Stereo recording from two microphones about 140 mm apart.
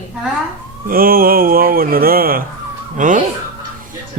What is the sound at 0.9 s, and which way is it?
Speech, 90° right.